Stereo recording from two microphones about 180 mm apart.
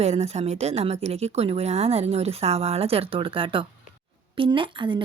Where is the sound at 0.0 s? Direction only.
35° right (ahead or behind).